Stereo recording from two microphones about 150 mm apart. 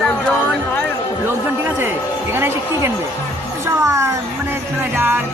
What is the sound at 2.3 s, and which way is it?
A man's voice, 15° right (ahead or behind).